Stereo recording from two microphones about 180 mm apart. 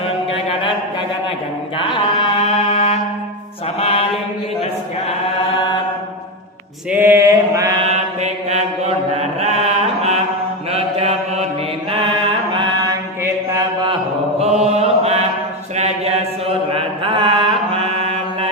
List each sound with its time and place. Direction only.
1.8 s mantra: 30° left (ahead or behind)
6.9 s mantra: 10° right (ahead or behind)
7.9 s chant: 35° right (ahead or behind)
10.7 s mantra: 35° right (ahead or behind)
12.5 s mantra: 20° right (ahead or behind)
14.4 s mantra: 35° right (ahead or behind)
15.7 s a sound: 35° right (ahead or behind)
16.7 s mantra: 30° right (ahead or behind)